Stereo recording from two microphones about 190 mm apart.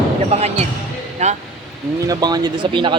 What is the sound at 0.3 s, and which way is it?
Speech, 35° right (ahead or behind).